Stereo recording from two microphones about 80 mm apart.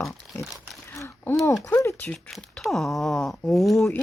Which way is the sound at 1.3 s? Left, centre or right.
Left.